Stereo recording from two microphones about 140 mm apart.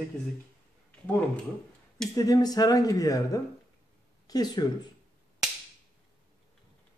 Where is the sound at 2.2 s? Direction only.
25° left (ahead or behind).